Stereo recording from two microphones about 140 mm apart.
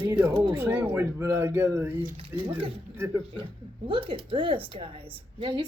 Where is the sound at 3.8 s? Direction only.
40° right (ahead or behind).